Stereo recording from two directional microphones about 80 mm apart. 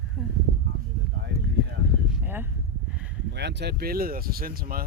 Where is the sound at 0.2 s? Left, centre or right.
Centre.